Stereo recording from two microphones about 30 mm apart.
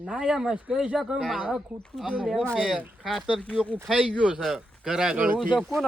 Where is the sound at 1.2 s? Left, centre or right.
Centre.